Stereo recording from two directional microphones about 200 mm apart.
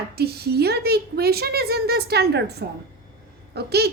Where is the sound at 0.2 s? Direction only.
50° right (ahead or behind).